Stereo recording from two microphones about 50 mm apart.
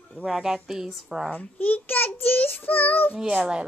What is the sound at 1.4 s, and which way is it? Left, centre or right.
A child's voice, left.